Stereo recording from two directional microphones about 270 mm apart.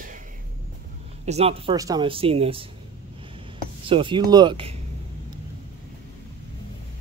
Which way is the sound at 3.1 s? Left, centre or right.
Centre.